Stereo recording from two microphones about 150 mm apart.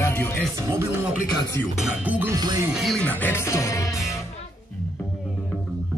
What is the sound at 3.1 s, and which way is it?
Speech, 15° left (ahead or behind).